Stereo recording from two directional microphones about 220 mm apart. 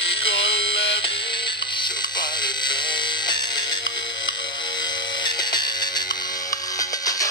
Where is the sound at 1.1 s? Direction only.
20° left (ahead or behind).